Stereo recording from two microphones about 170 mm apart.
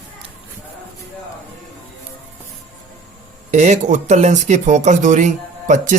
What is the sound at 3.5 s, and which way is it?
Speech, 45° right (ahead or behind).